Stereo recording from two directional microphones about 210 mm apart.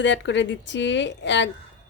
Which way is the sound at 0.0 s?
60° left (ahead or behind).